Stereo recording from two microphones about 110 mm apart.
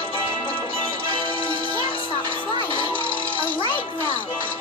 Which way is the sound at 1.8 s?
50° left (ahead or behind).